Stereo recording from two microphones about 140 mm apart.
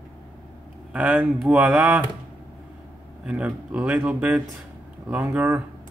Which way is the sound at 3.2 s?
10° right (ahead or behind).